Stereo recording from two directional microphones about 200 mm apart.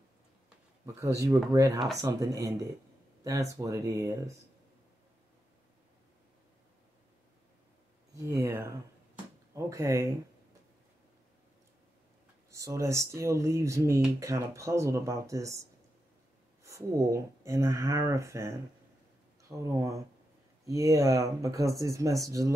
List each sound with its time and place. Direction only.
0.8 s speech: 15° right (ahead or behind)
8.2 s speech: 15° right (ahead or behind)
12.4 s speech: 15° right (ahead or behind)
16.6 s speech: 15° right (ahead or behind)